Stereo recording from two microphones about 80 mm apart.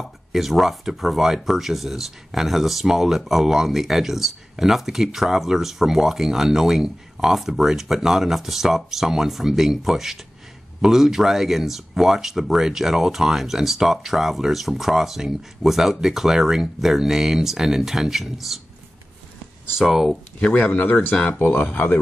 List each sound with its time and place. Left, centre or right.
0.0 s speech: centre
19.8 s speech: centre
20.3 s speech: centre